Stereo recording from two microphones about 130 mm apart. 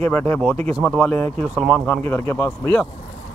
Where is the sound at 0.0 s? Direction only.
10° left (ahead or behind).